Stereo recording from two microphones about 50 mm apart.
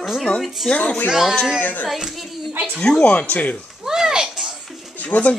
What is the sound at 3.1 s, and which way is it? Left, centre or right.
Speech, left.